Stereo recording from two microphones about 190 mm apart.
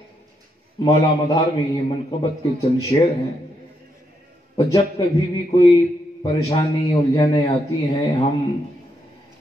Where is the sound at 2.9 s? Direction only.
25° left (ahead or behind).